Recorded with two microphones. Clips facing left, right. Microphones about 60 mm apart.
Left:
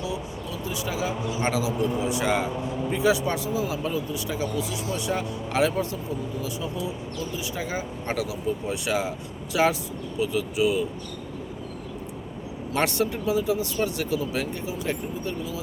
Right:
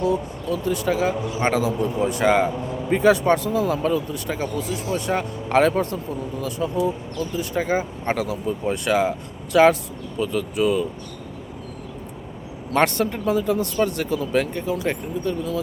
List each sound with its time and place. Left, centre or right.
0.0 s speech: right
12.7 s speech: right